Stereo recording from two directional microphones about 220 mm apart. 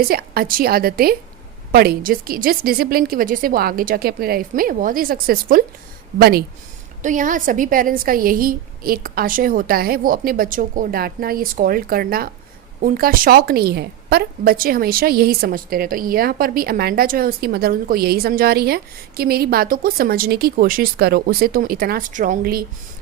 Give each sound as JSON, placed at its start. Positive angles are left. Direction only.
{"t": 0.0, "sound": "a woman's voice", "side_deg": -45}